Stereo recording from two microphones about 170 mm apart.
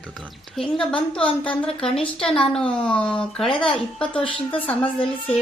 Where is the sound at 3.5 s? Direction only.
30° left (ahead or behind).